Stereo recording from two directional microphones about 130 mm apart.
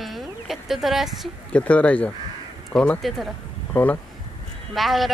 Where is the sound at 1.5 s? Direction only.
10° left (ahead or behind).